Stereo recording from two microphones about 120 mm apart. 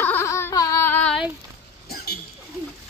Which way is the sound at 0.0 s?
20° left (ahead or behind).